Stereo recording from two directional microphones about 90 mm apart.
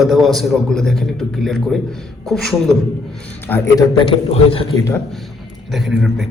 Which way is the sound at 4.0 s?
90° left.